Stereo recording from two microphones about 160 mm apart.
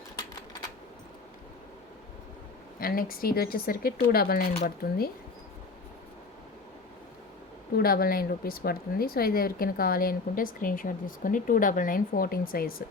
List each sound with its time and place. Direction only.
2.8 s speech: 65° left (ahead or behind)
7.8 s speech: 70° left (ahead or behind)